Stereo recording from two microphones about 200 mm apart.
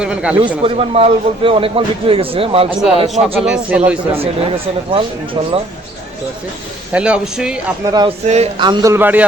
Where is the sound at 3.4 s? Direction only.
5° right (ahead or behind).